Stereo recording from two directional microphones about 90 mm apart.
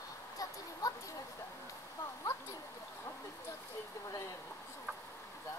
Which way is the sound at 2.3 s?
30° left (ahead or behind).